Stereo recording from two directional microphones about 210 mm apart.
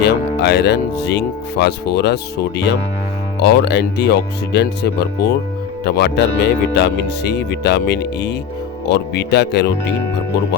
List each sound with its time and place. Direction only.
0.0 s speech: 50° left (ahead or behind)
3.4 s speech: 55° left (ahead or behind)